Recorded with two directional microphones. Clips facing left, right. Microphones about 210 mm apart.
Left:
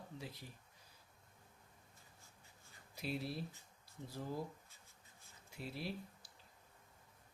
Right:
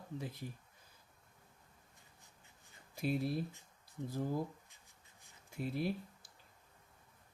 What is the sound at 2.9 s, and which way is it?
Speech, 50° right (ahead or behind).